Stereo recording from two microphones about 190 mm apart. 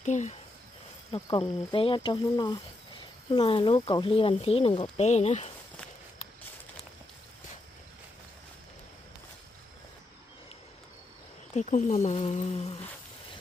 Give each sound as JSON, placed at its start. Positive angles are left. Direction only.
{"t": 0.0, "sound": "speech", "side_deg": 40}
{"t": 1.1, "sound": "speech", "side_deg": 25}
{"t": 11.5, "sound": "speech", "side_deg": 40}